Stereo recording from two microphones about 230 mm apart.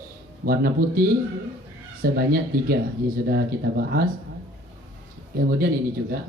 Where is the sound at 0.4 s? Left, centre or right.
Right.